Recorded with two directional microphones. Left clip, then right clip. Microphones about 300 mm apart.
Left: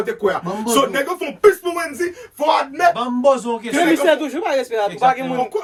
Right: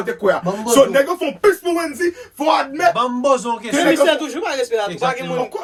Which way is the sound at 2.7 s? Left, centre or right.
Centre.